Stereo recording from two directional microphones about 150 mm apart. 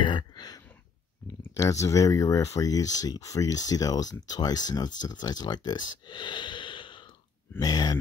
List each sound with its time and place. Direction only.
0.0 s throat clearing: 30° left (ahead or behind)
1.6 s speech: 20° left (ahead or behind)